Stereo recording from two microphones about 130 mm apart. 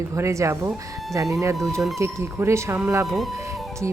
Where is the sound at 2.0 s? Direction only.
20° right (ahead or behind).